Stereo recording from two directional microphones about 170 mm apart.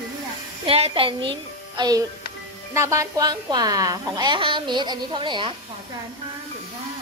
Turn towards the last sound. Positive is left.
turn(degrees=-25)  # may be behind; listen again after turning